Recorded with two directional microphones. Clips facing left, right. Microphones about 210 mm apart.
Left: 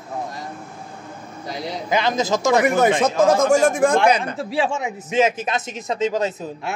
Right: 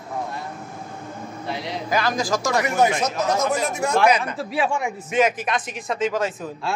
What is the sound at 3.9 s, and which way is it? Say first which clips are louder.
A man's voice: left 1 dB; 30° left (ahead or behind).